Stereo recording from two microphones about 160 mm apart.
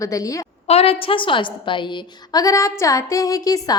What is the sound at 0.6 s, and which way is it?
A woman's voice, 35° left (ahead or behind).